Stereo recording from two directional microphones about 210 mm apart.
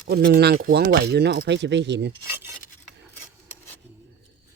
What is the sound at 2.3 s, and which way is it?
Filing, 10° right (ahead or behind).